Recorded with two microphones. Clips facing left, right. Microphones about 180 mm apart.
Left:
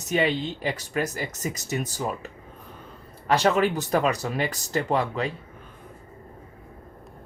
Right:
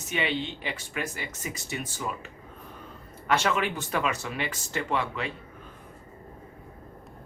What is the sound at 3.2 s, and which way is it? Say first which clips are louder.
Speech: left 5 dB; 35° left (ahead or behind).